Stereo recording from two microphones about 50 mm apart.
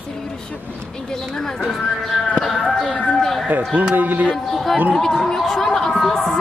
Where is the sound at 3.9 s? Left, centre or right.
Right.